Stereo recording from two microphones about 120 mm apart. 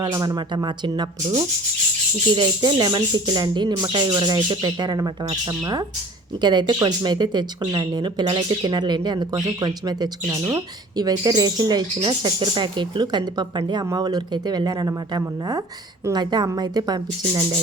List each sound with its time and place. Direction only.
0.0 s speech: 30° right (ahead or behind)
2.3 s speech: 35° right (ahead or behind)
6.4 s speech: 35° right (ahead or behind)